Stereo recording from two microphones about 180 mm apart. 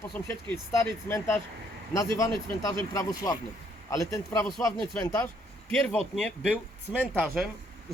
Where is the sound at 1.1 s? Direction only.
15° left (ahead or behind).